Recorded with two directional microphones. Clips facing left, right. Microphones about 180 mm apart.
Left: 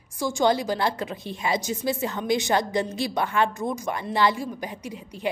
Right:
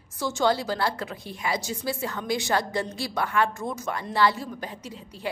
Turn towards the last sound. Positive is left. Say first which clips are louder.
# left 4 dB
turn(degrees=15)  # may be behind; listen again after turning